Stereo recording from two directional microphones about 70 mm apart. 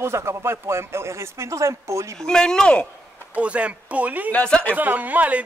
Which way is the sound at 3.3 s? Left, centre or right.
Centre.